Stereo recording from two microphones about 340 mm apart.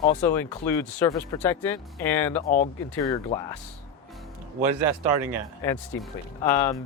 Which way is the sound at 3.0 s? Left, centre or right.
Centre.